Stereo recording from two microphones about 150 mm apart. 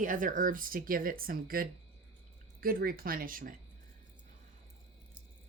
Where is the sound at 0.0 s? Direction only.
65° right (ahead or behind).